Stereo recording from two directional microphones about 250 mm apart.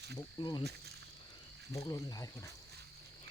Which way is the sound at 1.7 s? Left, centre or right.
Centre.